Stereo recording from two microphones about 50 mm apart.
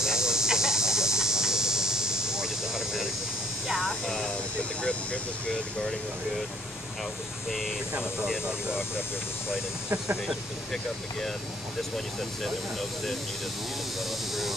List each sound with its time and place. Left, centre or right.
0.0 s a sound: centre
3.8 s speech: centre
7.9 s speech: centre